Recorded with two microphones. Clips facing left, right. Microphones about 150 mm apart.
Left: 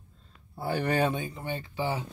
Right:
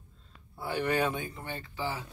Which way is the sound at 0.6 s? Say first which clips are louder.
Left 2 dB; 35° left (ahead or behind).